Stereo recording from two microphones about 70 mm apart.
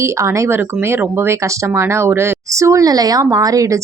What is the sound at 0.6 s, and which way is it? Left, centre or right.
Speech, right.